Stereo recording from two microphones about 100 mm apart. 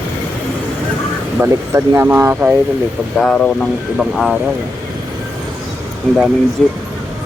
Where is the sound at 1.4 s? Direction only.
25° right (ahead or behind).